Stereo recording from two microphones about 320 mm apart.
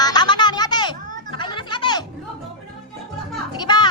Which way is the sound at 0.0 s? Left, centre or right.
Centre.